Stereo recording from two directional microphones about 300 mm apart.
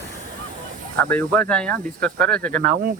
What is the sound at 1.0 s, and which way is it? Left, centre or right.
Speech, centre.